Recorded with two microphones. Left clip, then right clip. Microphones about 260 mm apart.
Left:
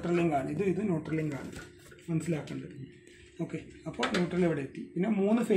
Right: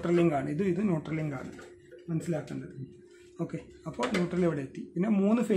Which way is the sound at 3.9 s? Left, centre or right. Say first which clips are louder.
Even; centre.